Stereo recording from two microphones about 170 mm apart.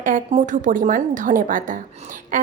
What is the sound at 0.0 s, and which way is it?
A woman's voice, 45° right (ahead or behind).